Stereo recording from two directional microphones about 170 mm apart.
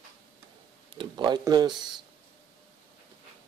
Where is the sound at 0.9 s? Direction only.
30° right (ahead or behind).